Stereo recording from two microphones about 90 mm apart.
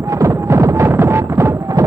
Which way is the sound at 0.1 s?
35° right (ahead or behind).